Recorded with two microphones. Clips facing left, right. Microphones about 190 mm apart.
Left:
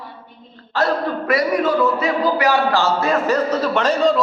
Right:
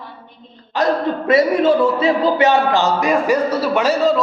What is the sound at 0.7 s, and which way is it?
Speech, 20° right (ahead or behind).